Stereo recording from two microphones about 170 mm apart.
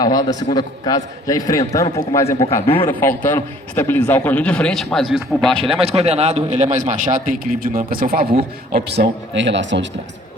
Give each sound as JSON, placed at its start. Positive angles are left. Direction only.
{"t": 0.0, "sound": "a man's voice", "side_deg": 20}
{"t": 5.8, "sound": "a man's voice", "side_deg": -40}
{"t": 8.7, "sound": "speech", "side_deg": -85}